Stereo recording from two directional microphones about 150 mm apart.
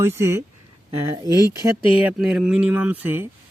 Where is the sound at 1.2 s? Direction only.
25° left (ahead or behind).